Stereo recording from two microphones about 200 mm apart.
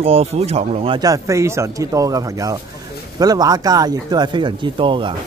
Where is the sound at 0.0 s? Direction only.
30° right (ahead or behind).